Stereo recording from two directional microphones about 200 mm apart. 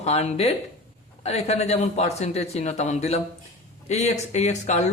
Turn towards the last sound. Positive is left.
turn(degrees=35)  # may be behind; listen again after turning